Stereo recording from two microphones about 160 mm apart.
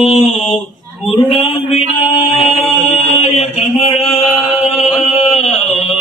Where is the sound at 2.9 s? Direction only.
45° left (ahead or behind).